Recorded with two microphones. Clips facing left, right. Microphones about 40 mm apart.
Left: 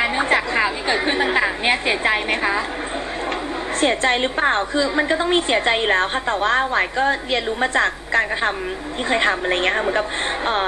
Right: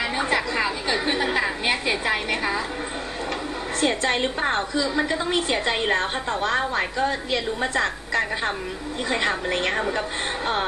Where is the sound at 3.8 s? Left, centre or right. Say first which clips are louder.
Left 4 dB; left.